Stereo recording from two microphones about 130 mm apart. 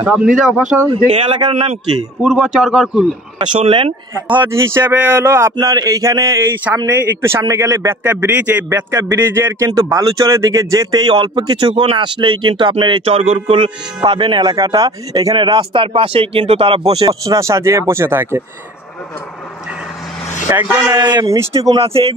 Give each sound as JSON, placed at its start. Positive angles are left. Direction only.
{"t": 0.7, "sound": "a man's voice", "side_deg": 0}
{"t": 1.0, "sound": "a man's voice", "side_deg": -45}
{"t": 2.2, "sound": "a man's voice", "side_deg": -5}
{"t": 3.3, "sound": "a man's voice", "side_deg": -40}
{"t": 4.3, "sound": "a man's voice", "side_deg": -15}
{"t": 17.0, "sound": "speech", "side_deg": -25}
{"t": 20.4, "sound": "speech", "side_deg": -20}
{"t": 21.7, "sound": "a man's voice", "side_deg": -45}